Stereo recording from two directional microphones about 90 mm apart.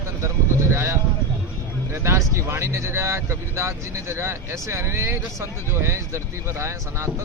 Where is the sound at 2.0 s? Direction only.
30° right (ahead or behind).